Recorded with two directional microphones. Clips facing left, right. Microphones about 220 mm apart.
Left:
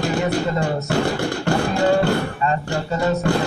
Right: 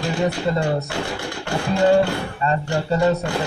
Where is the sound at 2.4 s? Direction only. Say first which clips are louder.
Right 3 dB; 35° right (ahead or behind).